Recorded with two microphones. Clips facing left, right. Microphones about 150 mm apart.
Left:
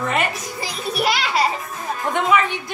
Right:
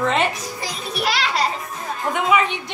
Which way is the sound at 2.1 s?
15° right (ahead or behind).